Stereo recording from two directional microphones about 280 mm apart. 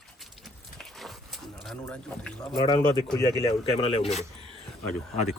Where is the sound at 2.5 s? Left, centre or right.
Centre.